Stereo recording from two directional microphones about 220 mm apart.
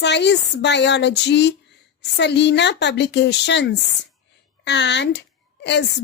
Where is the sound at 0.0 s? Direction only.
50° left (ahead or behind).